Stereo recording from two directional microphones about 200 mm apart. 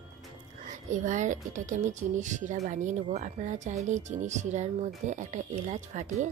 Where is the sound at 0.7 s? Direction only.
40° right (ahead or behind).